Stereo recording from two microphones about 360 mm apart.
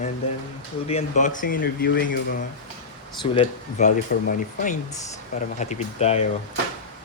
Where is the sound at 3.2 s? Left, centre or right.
Centre.